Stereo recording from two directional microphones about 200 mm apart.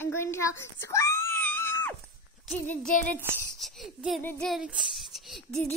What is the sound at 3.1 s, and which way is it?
A child's voice, centre (ahead or behind).